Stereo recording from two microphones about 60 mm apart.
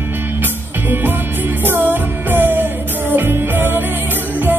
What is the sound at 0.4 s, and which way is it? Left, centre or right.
Music, right.